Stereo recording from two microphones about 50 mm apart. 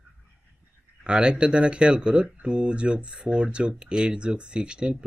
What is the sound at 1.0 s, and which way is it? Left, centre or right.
Speech, centre.